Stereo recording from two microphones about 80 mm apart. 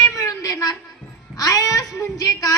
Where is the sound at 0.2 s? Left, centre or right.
Left.